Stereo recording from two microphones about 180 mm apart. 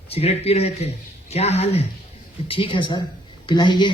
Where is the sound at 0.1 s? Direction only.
35° left (ahead or behind).